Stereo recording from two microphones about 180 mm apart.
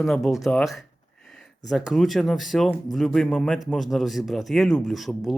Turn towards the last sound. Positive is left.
turn(degrees=0)  # may be behind; listen again after turning